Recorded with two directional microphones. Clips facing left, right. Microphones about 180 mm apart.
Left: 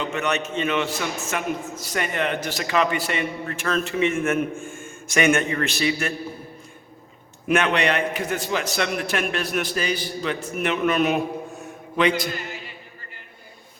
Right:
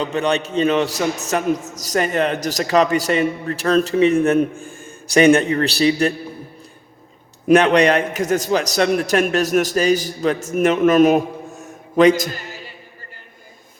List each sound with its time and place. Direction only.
0.0 s a man's voice: 35° right (ahead or behind)
7.4 s a man's voice: 35° right (ahead or behind)